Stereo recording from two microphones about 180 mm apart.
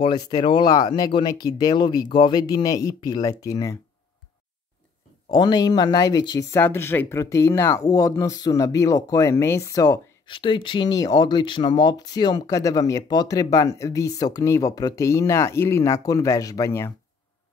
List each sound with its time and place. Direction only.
0.0 s speech: 25° left (ahead or behind)
5.3 s speech: 25° left (ahead or behind)